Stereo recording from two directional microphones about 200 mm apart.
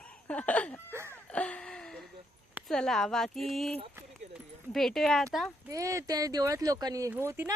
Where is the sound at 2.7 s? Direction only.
5° left (ahead or behind).